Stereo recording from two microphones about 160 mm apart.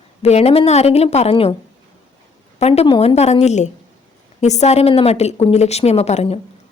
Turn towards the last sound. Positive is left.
turn(degrees=40)  # may be behind; listen again after turning